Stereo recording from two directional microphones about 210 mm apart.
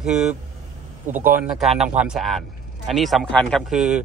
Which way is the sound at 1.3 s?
5° right (ahead or behind).